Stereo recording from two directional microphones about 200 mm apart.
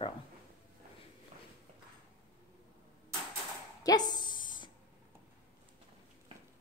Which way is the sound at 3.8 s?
20° left (ahead or behind).